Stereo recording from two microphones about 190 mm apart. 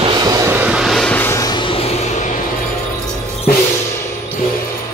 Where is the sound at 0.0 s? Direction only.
20° right (ahead or behind); by 1.8 s 25° left (ahead or behind).